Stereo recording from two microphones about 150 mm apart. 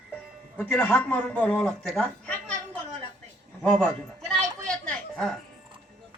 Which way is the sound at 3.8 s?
5° left (ahead or behind).